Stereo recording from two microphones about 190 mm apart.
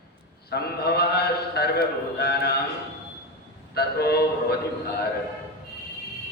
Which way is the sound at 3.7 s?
55° left (ahead or behind).